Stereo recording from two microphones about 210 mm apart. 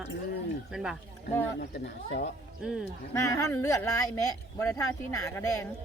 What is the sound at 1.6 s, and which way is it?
Speech, 55° left (ahead or behind).